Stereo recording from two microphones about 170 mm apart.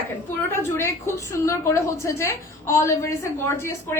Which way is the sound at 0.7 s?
15° left (ahead or behind).